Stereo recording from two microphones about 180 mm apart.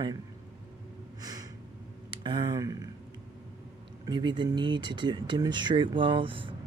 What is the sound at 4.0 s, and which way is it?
Speech, 25° right (ahead or behind).